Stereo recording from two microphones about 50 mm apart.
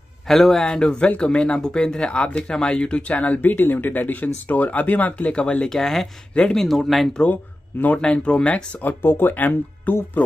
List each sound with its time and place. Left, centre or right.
0.3 s speech: centre
0.7 s speech: centre
3.3 s speech: left
5.7 s speech: centre
8.0 s speech: left
9.0 s speech: left